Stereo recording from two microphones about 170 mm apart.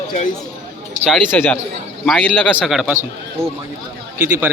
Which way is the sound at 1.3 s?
10° left (ahead or behind).